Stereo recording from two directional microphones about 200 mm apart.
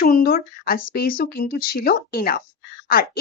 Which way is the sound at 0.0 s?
50° left (ahead or behind).